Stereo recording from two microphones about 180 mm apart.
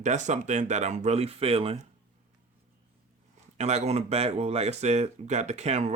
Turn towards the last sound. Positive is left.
turn(degrees=-40)  # may be behind; listen again after turning